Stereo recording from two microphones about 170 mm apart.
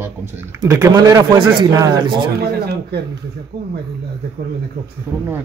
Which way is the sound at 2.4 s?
70° right (ahead or behind).